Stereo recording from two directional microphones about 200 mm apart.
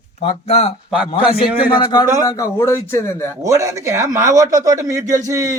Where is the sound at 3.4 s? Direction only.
15° right (ahead or behind).